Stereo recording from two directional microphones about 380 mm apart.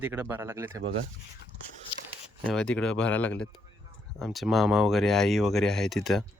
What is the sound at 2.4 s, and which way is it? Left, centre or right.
Speech, centre.